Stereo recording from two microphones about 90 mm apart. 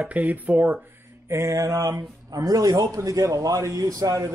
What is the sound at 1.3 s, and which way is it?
A man's voice, 35° right (ahead or behind).